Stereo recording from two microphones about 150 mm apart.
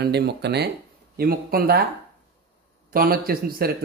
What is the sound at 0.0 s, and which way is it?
Speech, 90° right.